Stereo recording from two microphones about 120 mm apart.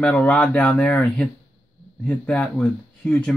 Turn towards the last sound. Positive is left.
turn(degrees=10)  # may be behind; listen again after turning